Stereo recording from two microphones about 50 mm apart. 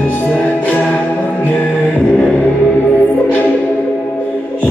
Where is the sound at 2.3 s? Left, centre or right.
Left.